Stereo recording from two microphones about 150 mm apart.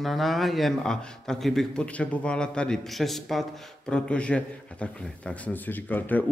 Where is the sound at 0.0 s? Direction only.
Centre (ahead or behind).